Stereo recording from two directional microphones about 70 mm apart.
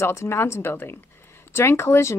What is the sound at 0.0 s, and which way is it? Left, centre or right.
A woman's voice, left.